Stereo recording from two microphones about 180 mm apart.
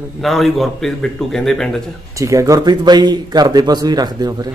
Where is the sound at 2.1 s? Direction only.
20° right (ahead or behind).